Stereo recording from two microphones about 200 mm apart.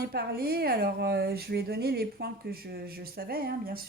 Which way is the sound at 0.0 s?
50° right (ahead or behind).